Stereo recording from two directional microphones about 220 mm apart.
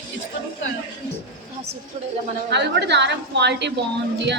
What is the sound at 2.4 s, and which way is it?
A woman's voice, 50° right (ahead or behind).